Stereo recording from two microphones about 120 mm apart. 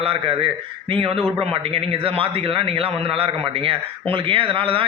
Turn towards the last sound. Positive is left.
turn(degrees=-50)  # may be behind; listen again after turning